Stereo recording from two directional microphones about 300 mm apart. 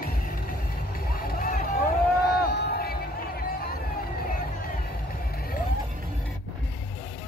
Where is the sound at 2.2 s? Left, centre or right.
Left.